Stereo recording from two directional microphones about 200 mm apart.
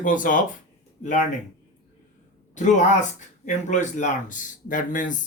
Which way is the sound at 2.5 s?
35° left (ahead or behind).